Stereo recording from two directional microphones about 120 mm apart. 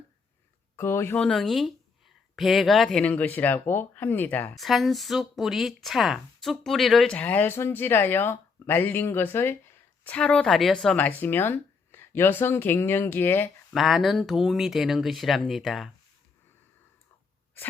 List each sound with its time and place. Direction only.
0.8 s speech: 20° left (ahead or behind)
4.5 s speech: centre (ahead or behind); by 13.5 s 15° left (ahead or behind)
13.7 s speech: centre (ahead or behind)